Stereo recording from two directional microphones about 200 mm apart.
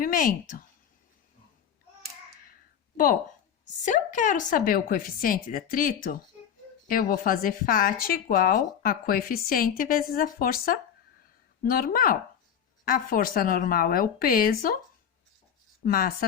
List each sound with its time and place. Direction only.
0.0 s speech: 45° left (ahead or behind)
3.8 s speech: 40° left (ahead or behind)
15.8 s speech: 45° left (ahead or behind)